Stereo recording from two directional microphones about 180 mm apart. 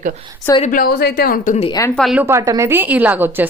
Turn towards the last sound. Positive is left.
turn(degrees=-10)  # may be behind; listen again after turning